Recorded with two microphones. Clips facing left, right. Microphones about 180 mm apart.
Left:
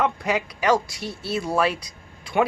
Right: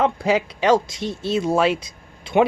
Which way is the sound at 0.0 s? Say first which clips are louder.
Right 4 dB; 25° right (ahead or behind).